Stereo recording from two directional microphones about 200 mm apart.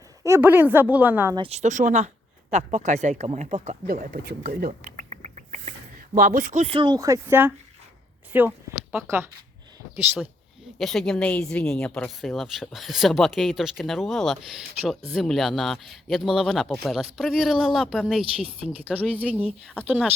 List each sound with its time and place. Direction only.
0.2 s a woman's voice: 15° right (ahead or behind)
1.4 s speech: 35° right (ahead or behind)
6.1 s a woman's voice: 45° right (ahead or behind); by 10.2 s 10° right (ahead or behind)
10.8 s a woman's voice: centre (ahead or behind)